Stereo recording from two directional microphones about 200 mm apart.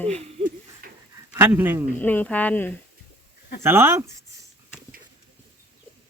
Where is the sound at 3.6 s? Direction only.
10° right (ahead or behind).